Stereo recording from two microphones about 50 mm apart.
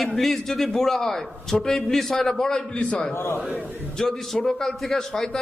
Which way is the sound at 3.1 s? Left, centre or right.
Left.